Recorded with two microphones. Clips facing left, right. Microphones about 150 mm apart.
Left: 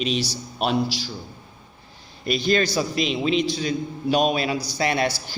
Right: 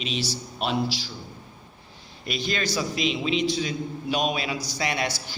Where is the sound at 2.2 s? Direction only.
40° left (ahead or behind).